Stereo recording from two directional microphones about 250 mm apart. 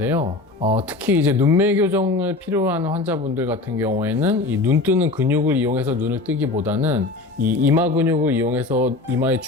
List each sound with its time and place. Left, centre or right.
0.2 s speech: right
1.0 s speech: centre